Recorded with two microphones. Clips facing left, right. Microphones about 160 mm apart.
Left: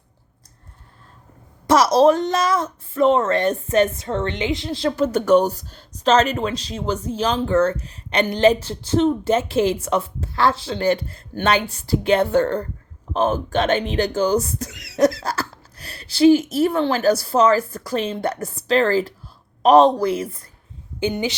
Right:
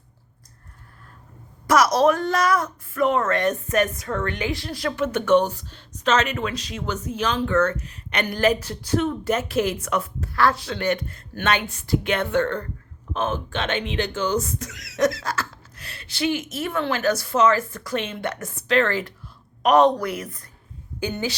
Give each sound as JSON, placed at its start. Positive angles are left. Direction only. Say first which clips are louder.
{"t": 1.6, "sound": "a woman's voice", "louder": "left 4 dB", "side_deg": 30}